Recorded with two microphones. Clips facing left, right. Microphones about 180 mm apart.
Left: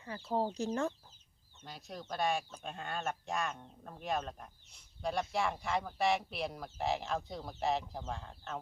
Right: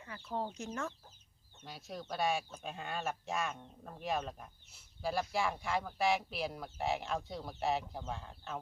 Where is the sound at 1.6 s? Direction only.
Centre (ahead or behind).